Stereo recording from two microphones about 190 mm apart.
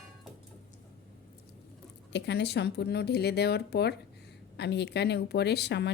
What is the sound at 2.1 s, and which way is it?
Speech, 65° left (ahead or behind).